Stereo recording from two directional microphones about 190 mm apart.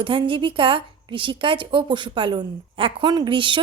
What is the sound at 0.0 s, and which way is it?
A woman's voice, 25° right (ahead or behind).